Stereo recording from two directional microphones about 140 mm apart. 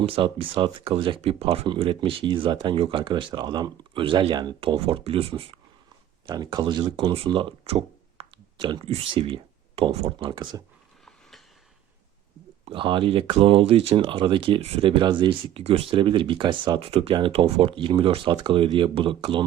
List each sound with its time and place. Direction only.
0.0 s speech: 40° right (ahead or behind)
6.2 s speech: 30° right (ahead or behind); by 10.2 s 45° right (ahead or behind)
10.2 s speech: 35° right (ahead or behind)
11.0 s a sound: centre (ahead or behind)
12.6 s speech: 35° right (ahead or behind)